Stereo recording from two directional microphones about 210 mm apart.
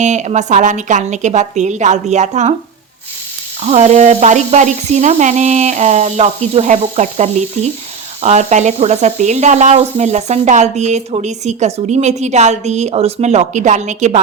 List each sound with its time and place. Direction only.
0.0 s speech: 35° right (ahead or behind)
3.6 s speech: 30° right (ahead or behind)